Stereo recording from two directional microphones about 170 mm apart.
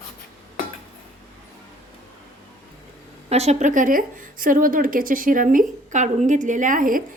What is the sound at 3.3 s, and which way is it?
A woman's voice, 40° right (ahead or behind).